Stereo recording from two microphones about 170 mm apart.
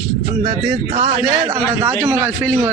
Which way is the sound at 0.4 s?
30° right (ahead or behind).